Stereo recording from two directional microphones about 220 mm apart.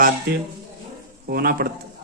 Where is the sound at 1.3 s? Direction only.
40° right (ahead or behind).